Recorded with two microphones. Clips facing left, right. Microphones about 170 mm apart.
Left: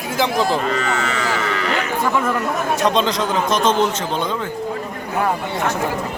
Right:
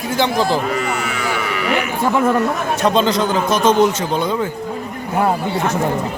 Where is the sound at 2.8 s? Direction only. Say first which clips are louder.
Right 4 dB; centre (ahead or behind).